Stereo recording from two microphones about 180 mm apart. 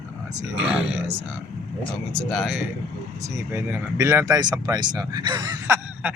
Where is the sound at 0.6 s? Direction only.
5° right (ahead or behind).